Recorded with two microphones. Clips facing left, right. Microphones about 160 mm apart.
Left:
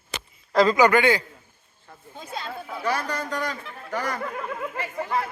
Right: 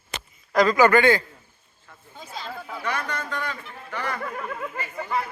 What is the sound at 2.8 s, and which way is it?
Speech, 35° left (ahead or behind).